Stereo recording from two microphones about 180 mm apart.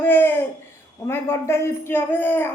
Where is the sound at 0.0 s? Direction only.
15° left (ahead or behind).